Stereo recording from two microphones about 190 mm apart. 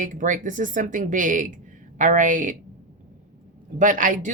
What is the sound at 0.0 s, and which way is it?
A woman's voice, 45° right (ahead or behind).